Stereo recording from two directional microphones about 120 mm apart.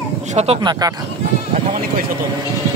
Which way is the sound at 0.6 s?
35° right (ahead or behind).